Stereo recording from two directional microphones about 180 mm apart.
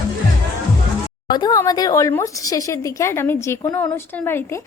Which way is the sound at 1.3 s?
20° left (ahead or behind).